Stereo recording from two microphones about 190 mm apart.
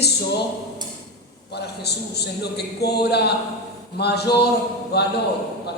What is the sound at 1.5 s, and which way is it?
A man's voice, 60° left (ahead or behind).